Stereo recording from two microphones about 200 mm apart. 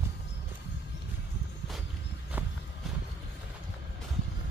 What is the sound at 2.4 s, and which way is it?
Clip-clop, 10° right (ahead or behind).